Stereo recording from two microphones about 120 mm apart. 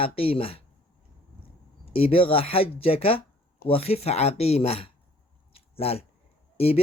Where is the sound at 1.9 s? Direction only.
55° left (ahead or behind).